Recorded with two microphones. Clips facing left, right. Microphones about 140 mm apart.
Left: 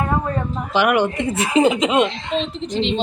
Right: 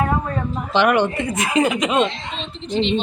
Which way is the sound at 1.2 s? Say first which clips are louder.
Left 3 dB; 30° left (ahead or behind).